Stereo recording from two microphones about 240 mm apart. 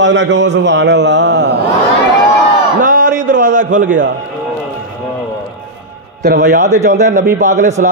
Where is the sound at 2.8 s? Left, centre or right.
Right.